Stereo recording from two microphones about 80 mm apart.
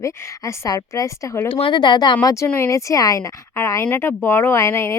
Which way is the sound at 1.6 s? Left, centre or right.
Left.